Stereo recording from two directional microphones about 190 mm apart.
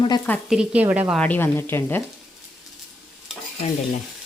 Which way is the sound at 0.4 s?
5° right (ahead or behind).